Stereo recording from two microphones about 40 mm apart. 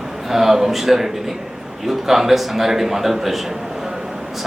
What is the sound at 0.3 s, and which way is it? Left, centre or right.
A man's voice, centre.